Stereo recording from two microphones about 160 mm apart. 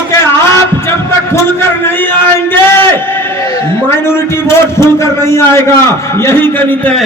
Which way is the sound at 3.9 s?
15° left (ahead or behind).